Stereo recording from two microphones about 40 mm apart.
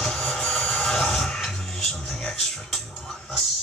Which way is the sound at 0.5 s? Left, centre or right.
Centre.